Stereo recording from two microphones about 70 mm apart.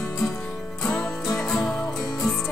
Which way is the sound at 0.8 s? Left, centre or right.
Centre.